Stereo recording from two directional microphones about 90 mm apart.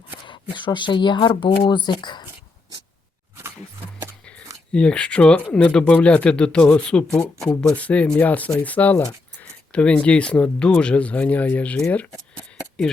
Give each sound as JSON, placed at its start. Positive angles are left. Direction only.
{"t": 0.3, "sound": "speech", "side_deg": 60}
{"t": 1.8, "sound": "speech", "side_deg": 55}
{"t": 4.7, "sound": "speech", "side_deg": 10}